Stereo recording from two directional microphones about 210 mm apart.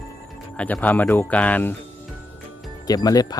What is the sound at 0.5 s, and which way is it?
Speech, 5° left (ahead or behind).